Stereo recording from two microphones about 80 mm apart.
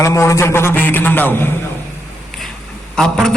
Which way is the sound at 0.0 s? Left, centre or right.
Left.